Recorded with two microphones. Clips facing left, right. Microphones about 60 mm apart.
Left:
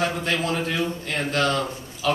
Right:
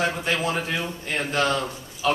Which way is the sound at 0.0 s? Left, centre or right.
Centre.